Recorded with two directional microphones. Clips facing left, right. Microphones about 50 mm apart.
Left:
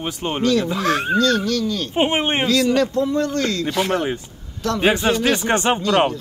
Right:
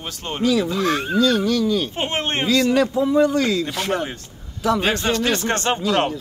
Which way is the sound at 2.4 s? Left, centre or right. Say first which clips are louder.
Right 2 dB; centre.